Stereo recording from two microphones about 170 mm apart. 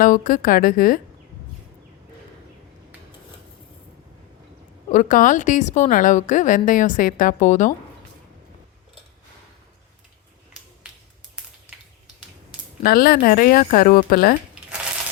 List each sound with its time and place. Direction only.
0.0 s speech: 55° left (ahead or behind)
4.9 s a woman's voice: 50° left (ahead or behind)
12.8 s speech: 60° left (ahead or behind)